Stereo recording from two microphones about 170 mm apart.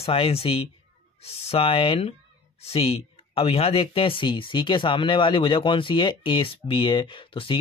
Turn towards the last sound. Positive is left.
turn(degrees=30)  # may be behind; listen again after turning